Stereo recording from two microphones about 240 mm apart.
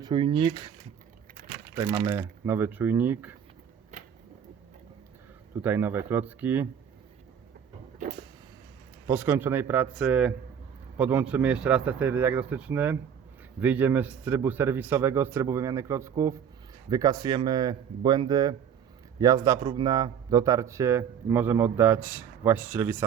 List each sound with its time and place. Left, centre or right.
0.0 s speech: centre
1.7 s speech: centre
5.6 s speech: centre
9.0 s a man's voice: centre